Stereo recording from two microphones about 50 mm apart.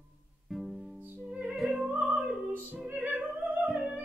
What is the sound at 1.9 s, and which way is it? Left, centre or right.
Music, right.